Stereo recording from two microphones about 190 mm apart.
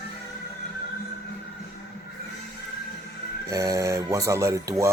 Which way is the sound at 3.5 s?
15° right (ahead or behind).